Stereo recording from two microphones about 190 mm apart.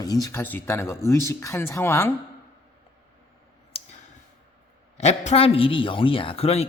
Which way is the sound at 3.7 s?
30° left (ahead or behind).